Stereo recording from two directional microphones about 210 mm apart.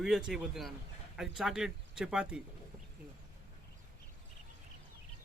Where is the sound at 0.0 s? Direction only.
Centre (ahead or behind).